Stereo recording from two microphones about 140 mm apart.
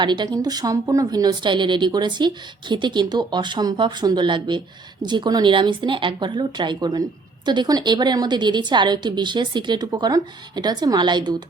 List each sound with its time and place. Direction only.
0.0 s a woman's voice: 30° right (ahead or behind)